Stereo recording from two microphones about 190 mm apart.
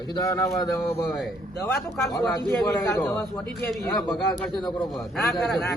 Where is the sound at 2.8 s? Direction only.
15° left (ahead or behind).